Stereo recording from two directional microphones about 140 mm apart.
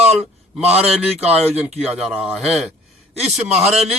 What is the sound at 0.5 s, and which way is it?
A man's voice, 10° right (ahead or behind).